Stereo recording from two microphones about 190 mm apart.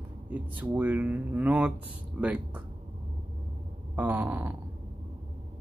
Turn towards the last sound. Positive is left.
turn(degrees=-10)  # may be behind; listen again after turning